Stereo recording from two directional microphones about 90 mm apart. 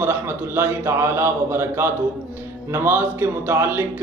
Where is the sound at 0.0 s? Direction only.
25° right (ahead or behind).